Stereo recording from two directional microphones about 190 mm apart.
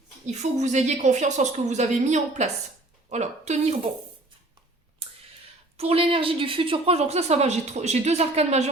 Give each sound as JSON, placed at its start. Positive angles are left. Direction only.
{"t": 0.3, "sound": "a woman's voice", "side_deg": -35}
{"t": 5.7, "sound": "a woman's voice", "side_deg": -30}